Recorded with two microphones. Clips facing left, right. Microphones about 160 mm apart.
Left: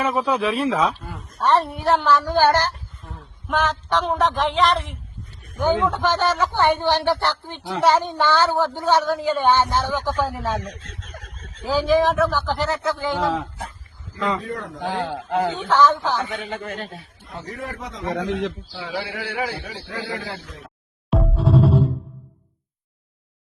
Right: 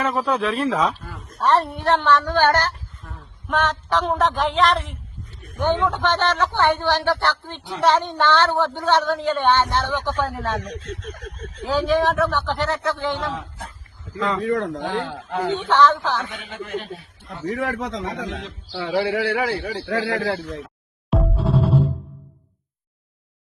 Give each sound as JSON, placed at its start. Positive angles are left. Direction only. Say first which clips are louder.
{"t": 0.0, "sound": "a woman's voice", "louder": "left 1 dB", "side_deg": 0}
{"t": 11.6, "sound": "speech", "louder": "left 1 dB", "side_deg": 0}
{"t": 14.2, "sound": "speech", "louder": "right 1 dB", "side_deg": 5}
{"t": 14.4, "sound": "speech", "louder": "right 8 dB", "side_deg": -90}
{"t": 15.3, "sound": "a man's voice", "louder": "left 2 dB", "side_deg": 30}
{"t": 15.5, "sound": "speech", "louder": "right 2 dB", "side_deg": 0}
{"t": 16.4, "sound": "a man's voice", "louder": "even", "side_deg": 40}
{"t": 17.5, "sound": "speech", "louder": "right 8 dB", "side_deg": -90}
{"t": 18.0, "sound": "speech", "louder": "left 5 dB", "side_deg": 75}
{"t": 18.7, "sound": "a man's voice", "louder": "right 8 dB", "side_deg": -70}
{"t": 21.1, "sound": "music", "louder": "left 2 dB", "side_deg": 0}